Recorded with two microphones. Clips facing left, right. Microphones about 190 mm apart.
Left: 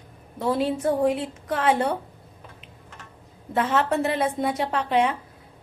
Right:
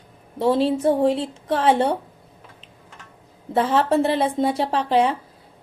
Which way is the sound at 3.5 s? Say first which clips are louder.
Right 4 dB; 30° right (ahead or behind).